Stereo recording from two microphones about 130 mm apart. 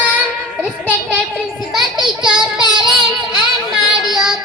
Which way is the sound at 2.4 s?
35° right (ahead or behind).